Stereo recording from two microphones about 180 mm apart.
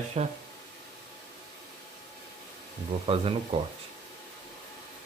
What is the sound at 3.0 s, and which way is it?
Speech, 30° right (ahead or behind).